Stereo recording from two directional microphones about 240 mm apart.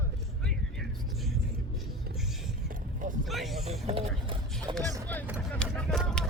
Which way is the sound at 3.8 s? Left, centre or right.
Right.